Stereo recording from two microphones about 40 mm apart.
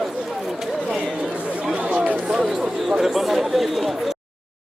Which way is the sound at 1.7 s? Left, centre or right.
Right.